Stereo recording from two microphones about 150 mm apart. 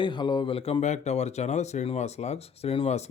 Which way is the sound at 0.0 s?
30° left (ahead or behind).